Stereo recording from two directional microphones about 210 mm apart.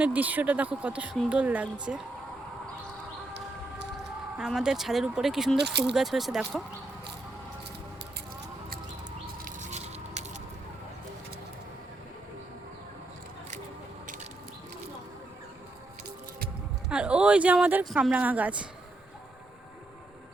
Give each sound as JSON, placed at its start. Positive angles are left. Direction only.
{"t": 0.0, "sound": "speech", "side_deg": -5}
{"t": 4.4, "sound": "speech", "side_deg": 0}
{"t": 5.5, "sound": "speech", "side_deg": -55}
{"t": 5.8, "sound": "speech", "side_deg": 0}
{"t": 9.4, "sound": "squish", "side_deg": -35}
{"t": 16.9, "sound": "speech", "side_deg": -5}